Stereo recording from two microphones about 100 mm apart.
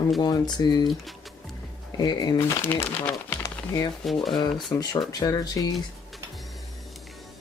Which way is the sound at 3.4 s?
35° left (ahead or behind).